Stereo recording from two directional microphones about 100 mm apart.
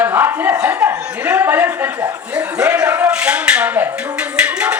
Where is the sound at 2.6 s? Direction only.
10° right (ahead or behind).